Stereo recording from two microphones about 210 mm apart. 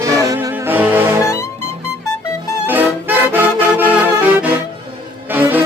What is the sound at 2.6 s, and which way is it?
Music, 10° right (ahead or behind).